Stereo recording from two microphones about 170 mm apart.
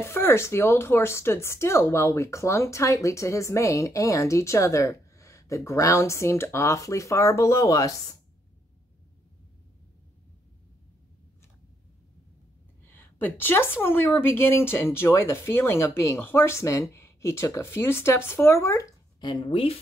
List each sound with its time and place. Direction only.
0.0 s speech: 15° left (ahead or behind)
12.8 s speech: 10° left (ahead or behind); by 19.8 s 35° left (ahead or behind)